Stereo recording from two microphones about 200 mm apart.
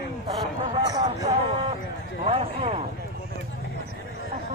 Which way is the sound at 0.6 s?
20° right (ahead or behind).